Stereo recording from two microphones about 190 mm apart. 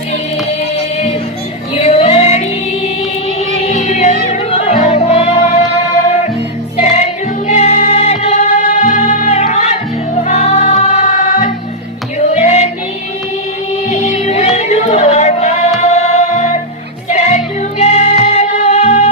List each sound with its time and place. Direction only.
1.8 s female singing: 30° left (ahead or behind)
3.3 s music: 35° left (ahead or behind)
6.8 s music: 35° left (ahead or behind)
13.8 s music: 35° left (ahead or behind)